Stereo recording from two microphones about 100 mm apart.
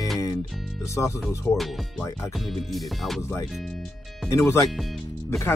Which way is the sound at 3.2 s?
25° left (ahead or behind).